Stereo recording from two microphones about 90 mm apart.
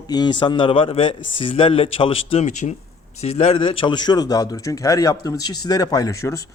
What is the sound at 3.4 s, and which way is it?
A man's voice, 90° left.